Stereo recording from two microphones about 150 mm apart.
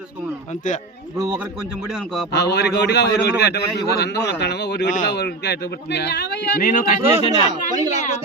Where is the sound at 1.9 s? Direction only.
Centre (ahead or behind).